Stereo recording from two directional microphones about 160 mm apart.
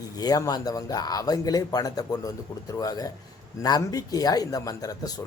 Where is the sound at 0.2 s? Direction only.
25° left (ahead or behind).